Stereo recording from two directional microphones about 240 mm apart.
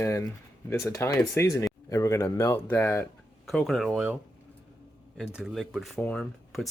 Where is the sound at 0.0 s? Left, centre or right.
Centre.